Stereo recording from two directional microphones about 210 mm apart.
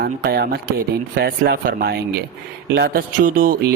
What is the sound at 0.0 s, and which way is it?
Speech, 50° right (ahead or behind).